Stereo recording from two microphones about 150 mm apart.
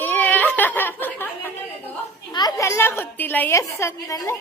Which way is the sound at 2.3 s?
25° left (ahead or behind).